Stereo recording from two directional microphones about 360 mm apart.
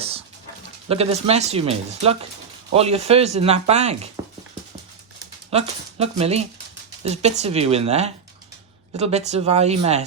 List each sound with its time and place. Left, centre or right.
0.0 s dog: centre
0.9 s speech: centre
5.5 s speech: centre